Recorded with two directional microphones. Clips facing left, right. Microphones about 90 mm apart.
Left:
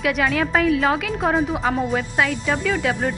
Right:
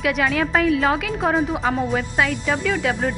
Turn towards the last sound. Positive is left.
turn(degrees=0)  # may be behind; listen again after turning